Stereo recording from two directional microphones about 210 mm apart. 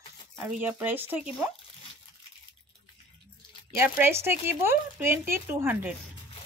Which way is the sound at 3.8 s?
10° right (ahead or behind).